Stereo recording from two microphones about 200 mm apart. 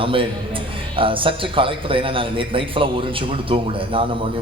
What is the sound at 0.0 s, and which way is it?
A man's voice, 25° right (ahead or behind).